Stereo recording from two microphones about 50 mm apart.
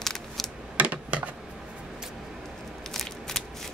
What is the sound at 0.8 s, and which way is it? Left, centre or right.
Computer keyboard, right.